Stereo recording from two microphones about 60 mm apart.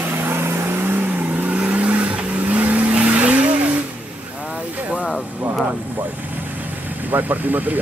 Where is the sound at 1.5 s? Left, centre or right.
Right.